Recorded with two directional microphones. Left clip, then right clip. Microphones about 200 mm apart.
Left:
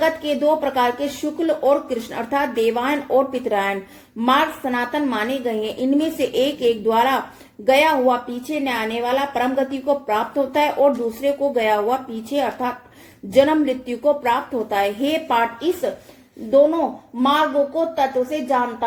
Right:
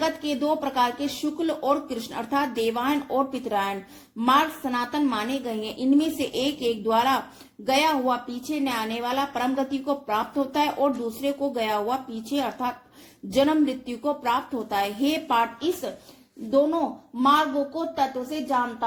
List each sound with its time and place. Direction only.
0.0 s a woman's voice: 35° right (ahead or behind)
17.2 s a woman's voice: 35° right (ahead or behind)